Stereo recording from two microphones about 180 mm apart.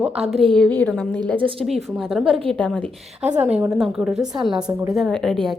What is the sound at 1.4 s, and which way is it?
Speech, 30° right (ahead or behind).